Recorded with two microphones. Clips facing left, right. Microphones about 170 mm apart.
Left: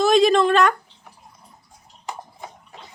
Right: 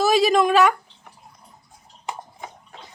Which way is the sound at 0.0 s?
5° right (ahead or behind).